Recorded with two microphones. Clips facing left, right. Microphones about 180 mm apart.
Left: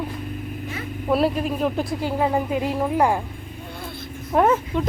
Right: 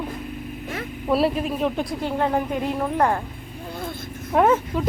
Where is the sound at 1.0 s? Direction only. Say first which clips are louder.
Even; centre (ahead or behind).